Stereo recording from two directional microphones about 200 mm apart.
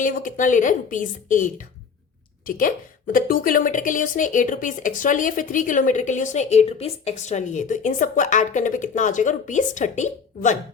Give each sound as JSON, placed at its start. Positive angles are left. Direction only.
{"t": 0.0, "sound": "a woman's voice", "side_deg": 40}